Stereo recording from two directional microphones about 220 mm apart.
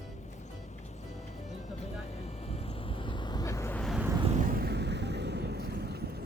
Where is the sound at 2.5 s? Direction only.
25° left (ahead or behind); by 4.1 s centre (ahead or behind).